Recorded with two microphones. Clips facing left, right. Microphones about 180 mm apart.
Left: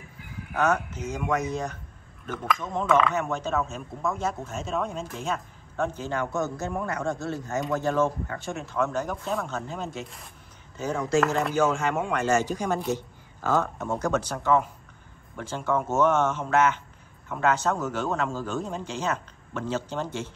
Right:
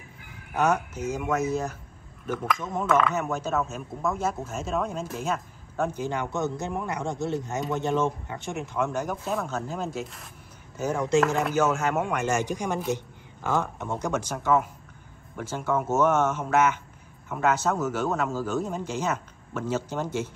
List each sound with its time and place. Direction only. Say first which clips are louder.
0.6 s speech: right 1 dB; 15° right (ahead or behind)
6.0 s speech: even; 20° right (ahead or behind)
9.1 s a man's voice: right 1 dB; centre (ahead or behind)